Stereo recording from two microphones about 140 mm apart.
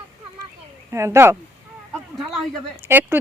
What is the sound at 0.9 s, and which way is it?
Speech, 20° right (ahead or behind).